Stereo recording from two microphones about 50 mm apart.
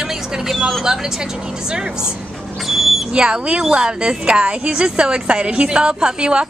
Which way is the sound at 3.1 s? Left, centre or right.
Centre.